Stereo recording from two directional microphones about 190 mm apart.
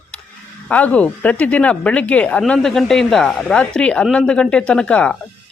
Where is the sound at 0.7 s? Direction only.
5° left (ahead or behind).